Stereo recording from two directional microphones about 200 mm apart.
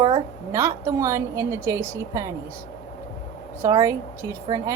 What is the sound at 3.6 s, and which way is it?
A woman's voice, 15° right (ahead or behind).